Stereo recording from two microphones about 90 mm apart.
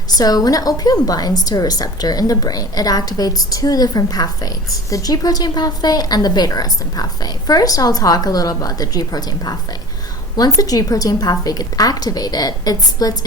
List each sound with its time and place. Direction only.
0.2 s a woman's voice: 45° left (ahead or behind)